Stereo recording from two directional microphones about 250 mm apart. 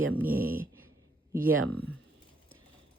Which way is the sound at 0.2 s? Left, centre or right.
Centre.